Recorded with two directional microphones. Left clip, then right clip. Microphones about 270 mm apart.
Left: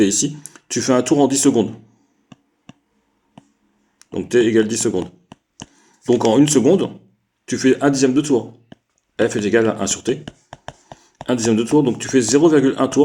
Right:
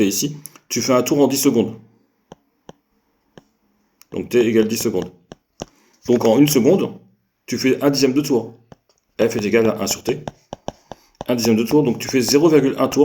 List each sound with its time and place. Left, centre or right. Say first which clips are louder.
0.0 s speech: left 2 dB; left
3.9 s speech: left 1 dB; left
5.7 s a sound: left 1 dB; left
6.3 s speech: left 1 dB; left